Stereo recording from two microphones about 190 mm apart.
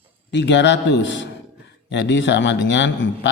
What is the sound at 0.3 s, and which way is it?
A man's voice, 70° left (ahead or behind).